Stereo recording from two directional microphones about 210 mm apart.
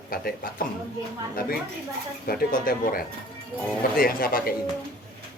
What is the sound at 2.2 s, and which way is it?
Speech, 45° left (ahead or behind).